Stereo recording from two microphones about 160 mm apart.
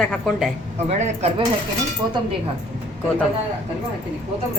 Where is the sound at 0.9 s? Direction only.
45° right (ahead or behind).